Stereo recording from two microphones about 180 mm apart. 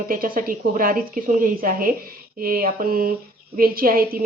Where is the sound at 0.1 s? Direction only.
50° right (ahead or behind).